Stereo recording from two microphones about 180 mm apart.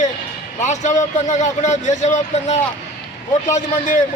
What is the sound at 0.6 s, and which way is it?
A man's voice, 40° left (ahead or behind).